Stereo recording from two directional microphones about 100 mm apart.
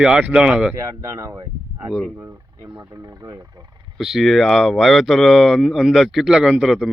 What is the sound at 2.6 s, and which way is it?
Speech, 40° right (ahead or behind).